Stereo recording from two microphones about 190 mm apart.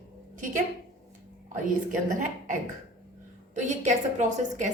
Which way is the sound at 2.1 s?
45° right (ahead or behind).